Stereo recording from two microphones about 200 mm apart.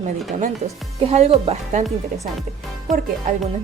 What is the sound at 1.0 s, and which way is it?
Speech, 35° right (ahead or behind).